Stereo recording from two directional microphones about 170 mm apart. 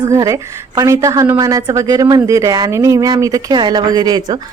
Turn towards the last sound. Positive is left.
turn(degrees=-25)  # may be behind; listen again after turning